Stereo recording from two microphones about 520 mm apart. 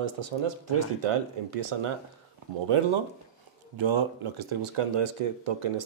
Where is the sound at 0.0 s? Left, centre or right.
Right.